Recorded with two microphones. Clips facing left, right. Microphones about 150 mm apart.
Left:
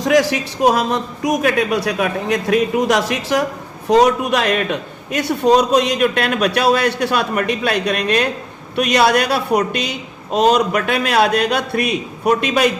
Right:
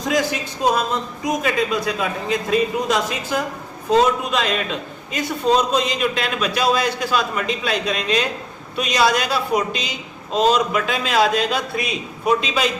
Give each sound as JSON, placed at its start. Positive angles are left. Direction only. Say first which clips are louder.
{"t": 0.1, "sound": "a man's voice", "louder": "left 6 dB", "side_deg": 85}